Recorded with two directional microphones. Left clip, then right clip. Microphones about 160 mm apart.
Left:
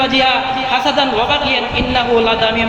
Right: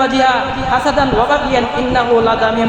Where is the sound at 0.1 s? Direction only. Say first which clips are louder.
Even; 40° right (ahead or behind).